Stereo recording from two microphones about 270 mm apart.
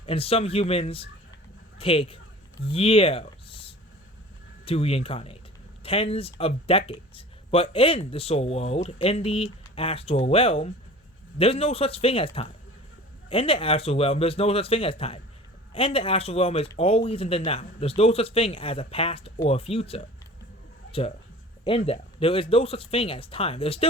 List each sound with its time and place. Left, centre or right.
0.0 s speech: left
21.6 s speech: left